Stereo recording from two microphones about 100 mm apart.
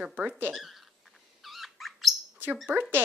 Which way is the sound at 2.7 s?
20° right (ahead or behind).